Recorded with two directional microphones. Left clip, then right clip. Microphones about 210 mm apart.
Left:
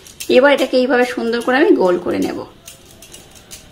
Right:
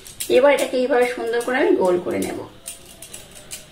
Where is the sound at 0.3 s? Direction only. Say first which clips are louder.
Left 4 dB; 50° left (ahead or behind).